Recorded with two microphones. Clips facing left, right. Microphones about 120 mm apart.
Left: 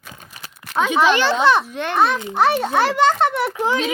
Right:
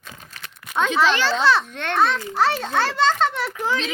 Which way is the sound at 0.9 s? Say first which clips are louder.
Left 4 dB; 15° left (ahead or behind).